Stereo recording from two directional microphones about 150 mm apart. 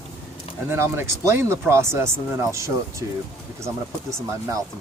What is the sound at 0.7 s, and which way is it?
Speech, 15° right (ahead or behind).